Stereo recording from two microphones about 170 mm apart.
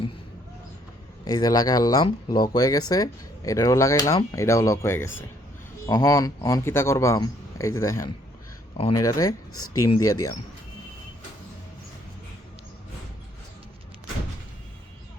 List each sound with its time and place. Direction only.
1.2 s a man's voice: 20° left (ahead or behind)